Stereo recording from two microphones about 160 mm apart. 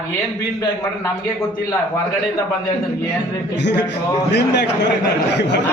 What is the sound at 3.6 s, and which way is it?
A man's voice, 90° left.